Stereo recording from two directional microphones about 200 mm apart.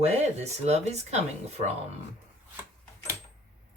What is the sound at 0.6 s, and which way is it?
Speech, 35° right (ahead or behind).